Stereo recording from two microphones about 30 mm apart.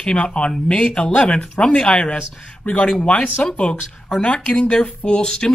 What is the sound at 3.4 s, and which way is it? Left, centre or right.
Speech, left.